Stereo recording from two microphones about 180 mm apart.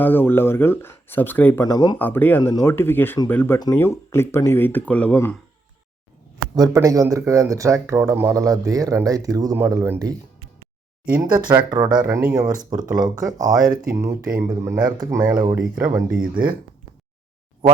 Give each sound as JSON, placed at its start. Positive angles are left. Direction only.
{"t": 0.0, "sound": "speech", "side_deg": 10}
{"t": 1.6, "sound": "speech", "side_deg": 25}
{"t": 2.0, "sound": "speech", "side_deg": 10}
{"t": 6.6, "sound": "speech", "side_deg": -20}
{"t": 11.5, "sound": "speech", "side_deg": -25}
{"t": 15.5, "sound": "speech", "side_deg": -5}
{"t": 16.3, "sound": "speech", "side_deg": -55}